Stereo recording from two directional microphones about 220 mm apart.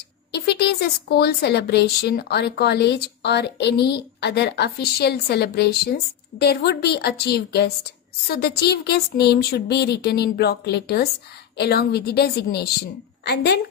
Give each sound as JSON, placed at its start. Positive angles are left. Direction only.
{"t": 0.3, "sound": "a woman's voice", "side_deg": 50}